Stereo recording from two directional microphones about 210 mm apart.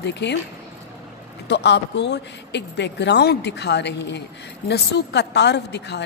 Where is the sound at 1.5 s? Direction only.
55° left (ahead or behind).